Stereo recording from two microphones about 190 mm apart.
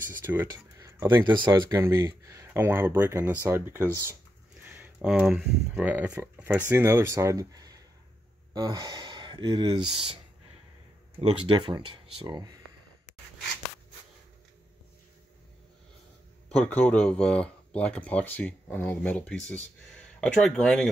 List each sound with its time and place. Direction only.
0.2 s speech: 10° right (ahead or behind)
1.2 s speech: 25° right (ahead or behind)
16.4 s speech: 5° left (ahead or behind)